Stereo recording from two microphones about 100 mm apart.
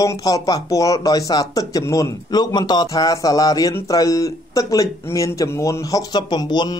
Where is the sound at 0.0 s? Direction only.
40° left (ahead or behind).